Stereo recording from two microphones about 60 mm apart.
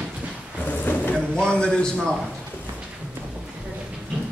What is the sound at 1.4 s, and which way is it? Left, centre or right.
Speech, centre.